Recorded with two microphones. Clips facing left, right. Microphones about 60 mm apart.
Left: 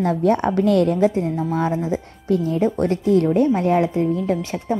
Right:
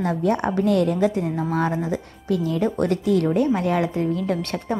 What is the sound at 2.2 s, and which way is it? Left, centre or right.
A woman's voice, left.